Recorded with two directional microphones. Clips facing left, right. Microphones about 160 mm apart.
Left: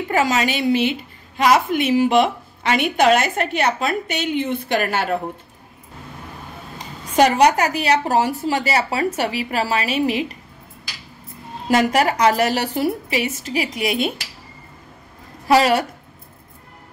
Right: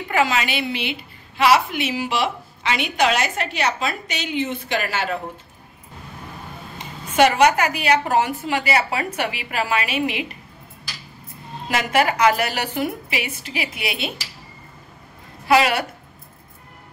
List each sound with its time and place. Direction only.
0.1 s a woman's voice: 40° left (ahead or behind)
6.8 s a woman's voice: 35° left (ahead or behind)
11.7 s a woman's voice: 40° left (ahead or behind)
15.4 s a woman's voice: 35° left (ahead or behind)